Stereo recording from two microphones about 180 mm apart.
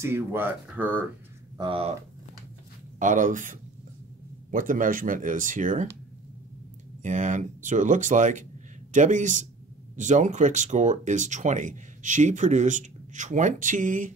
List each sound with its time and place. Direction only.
0.0 s speech: 15° right (ahead or behind)
1.6 s speech: 30° right (ahead or behind)
3.0 s speech: 45° right (ahead or behind)
7.0 s speech: 40° right (ahead or behind)